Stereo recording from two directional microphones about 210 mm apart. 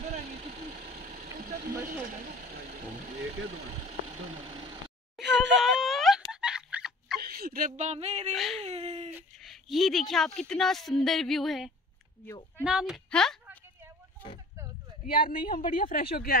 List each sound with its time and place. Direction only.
1.0 s vehicle: 45° right (ahead or behind)
5.2 s a sound: 55° right (ahead or behind)
5.6 s a sound: centre (ahead or behind)
7.2 s speech: 45° right (ahead or behind)
8.4 s speech: centre (ahead or behind)
8.6 s a sound: 30° right (ahead or behind)
9.4 s speech: centre (ahead or behind)
12.3 s speech: 10° left (ahead or behind)
12.6 s speech: 5° right (ahead or behind)
15.0 s a woman's voice: 40° left (ahead or behind)